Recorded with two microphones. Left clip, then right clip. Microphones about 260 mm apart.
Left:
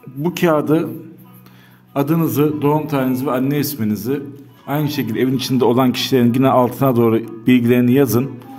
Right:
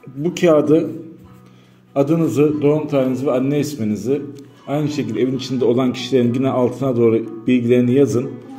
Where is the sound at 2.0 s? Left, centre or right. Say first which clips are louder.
Right 2 dB; left.